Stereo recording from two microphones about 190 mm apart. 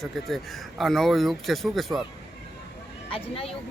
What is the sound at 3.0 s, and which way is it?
Speech, 30° left (ahead or behind).